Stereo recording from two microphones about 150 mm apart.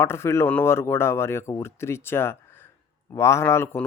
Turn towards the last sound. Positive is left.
turn(degrees=15)  # may be behind; listen again after turning